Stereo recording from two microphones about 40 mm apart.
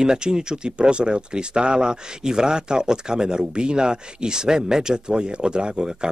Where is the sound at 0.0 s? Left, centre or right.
Centre.